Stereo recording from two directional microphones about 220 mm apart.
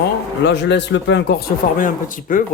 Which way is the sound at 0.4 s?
50° left (ahead or behind).